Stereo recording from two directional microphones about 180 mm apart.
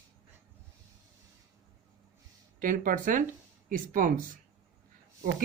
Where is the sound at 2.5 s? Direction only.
50° right (ahead or behind).